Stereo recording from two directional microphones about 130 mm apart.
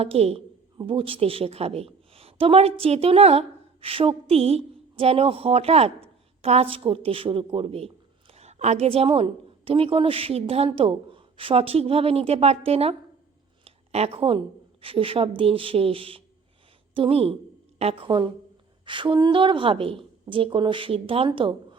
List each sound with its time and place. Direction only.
0.0 s a woman's voice: 50° right (ahead or behind)